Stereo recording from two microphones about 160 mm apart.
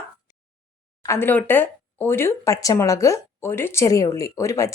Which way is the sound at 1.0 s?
15° left (ahead or behind).